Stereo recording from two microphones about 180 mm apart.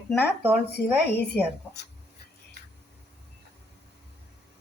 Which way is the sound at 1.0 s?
65° left (ahead or behind).